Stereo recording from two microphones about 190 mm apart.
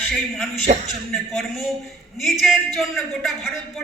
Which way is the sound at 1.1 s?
Centre (ahead or behind).